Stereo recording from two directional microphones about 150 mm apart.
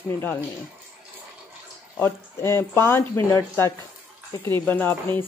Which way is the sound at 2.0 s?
15° left (ahead or behind).